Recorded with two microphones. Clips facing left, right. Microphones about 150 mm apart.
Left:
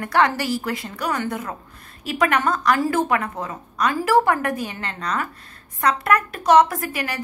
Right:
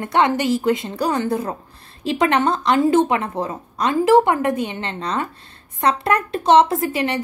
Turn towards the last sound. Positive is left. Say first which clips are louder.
# right 7 dB
turn(degrees=-25)  # may be behind; listen again after turning